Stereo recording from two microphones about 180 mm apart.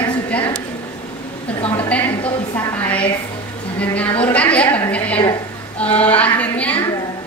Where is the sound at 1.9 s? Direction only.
10° left (ahead or behind).